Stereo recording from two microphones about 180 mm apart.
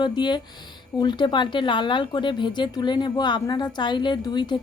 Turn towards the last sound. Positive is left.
turn(degrees=25)  # may be behind; listen again after turning